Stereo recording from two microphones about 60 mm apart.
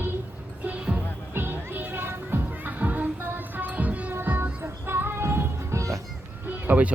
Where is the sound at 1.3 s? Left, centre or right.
Right.